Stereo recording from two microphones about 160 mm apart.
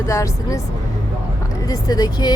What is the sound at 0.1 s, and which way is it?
Speech, 20° left (ahead or behind).